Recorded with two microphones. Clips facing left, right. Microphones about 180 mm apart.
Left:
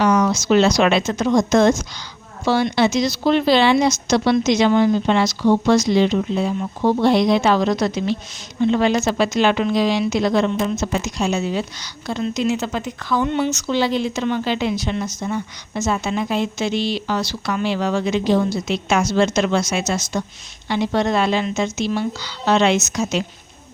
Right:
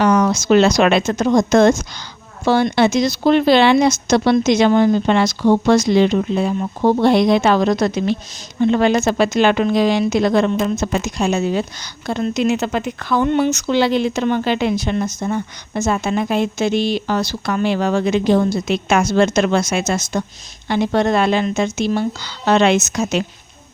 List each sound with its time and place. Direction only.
0.0 s a woman's voice: 55° right (ahead or behind)